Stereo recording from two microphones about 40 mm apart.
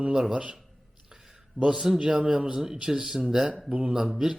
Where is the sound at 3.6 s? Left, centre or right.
Right.